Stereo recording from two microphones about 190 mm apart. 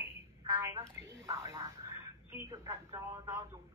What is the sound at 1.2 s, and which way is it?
Speech, 15° right (ahead or behind).